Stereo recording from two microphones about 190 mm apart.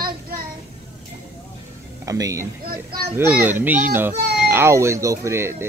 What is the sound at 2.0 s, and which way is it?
Speech, 15° right (ahead or behind).